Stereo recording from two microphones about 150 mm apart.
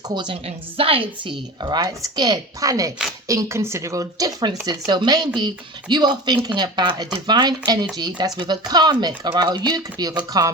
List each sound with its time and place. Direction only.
0.1 s a woman's voice: 30° right (ahead or behind)